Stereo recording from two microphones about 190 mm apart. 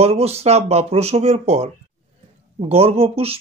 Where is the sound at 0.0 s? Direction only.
30° right (ahead or behind).